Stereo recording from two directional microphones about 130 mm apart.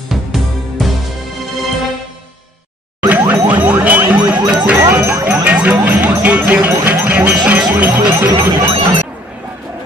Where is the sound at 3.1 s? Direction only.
10° right (ahead or behind).